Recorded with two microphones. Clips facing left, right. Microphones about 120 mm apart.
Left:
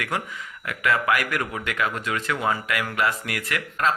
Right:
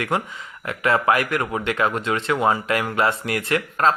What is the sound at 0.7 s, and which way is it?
Speech, 30° right (ahead or behind).